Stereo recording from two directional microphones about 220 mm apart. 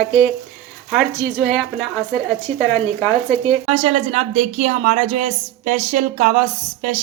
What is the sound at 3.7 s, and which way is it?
Speech, 30° right (ahead or behind).